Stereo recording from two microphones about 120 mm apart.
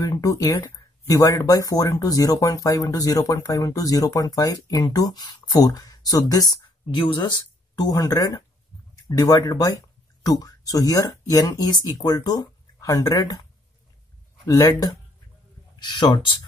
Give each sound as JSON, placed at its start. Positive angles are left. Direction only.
{"t": 0.0, "sound": "speech", "side_deg": 25}
{"t": 7.9, "sound": "speech", "side_deg": 30}